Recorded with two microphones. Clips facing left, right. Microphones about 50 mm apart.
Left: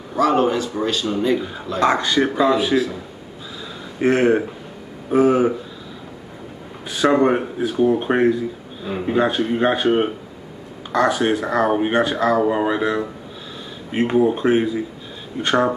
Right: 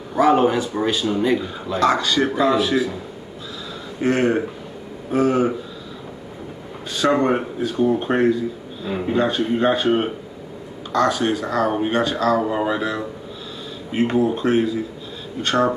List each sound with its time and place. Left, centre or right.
0.2 s a man's voice: centre
1.8 s speech: left
2.3 s speech: centre
4.0 s speech: centre
6.9 s speech: centre
10.9 s speech: centre